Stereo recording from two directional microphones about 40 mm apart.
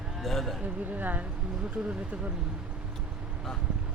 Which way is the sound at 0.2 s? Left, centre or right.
Centre.